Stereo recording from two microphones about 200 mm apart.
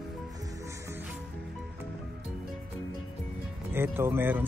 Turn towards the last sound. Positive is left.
turn(degrees=-10)  # may be behind; listen again after turning